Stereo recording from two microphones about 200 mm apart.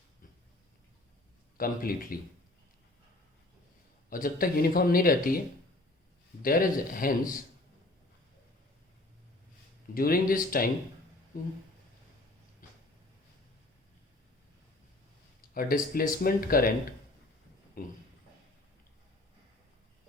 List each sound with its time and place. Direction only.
1.5 s speech: 45° left (ahead or behind)
4.1 s speech: 45° left (ahead or behind)
6.4 s speech: 45° left (ahead or behind)
9.9 s speech: 45° left (ahead or behind)
12.6 s a sound: 40° left (ahead or behind)
15.4 s speech: 45° left (ahead or behind)
17.8 s speech: 45° left (ahead or behind)